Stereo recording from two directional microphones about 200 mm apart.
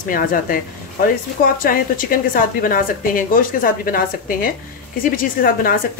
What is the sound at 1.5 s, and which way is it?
A woman's voice, 45° left (ahead or behind).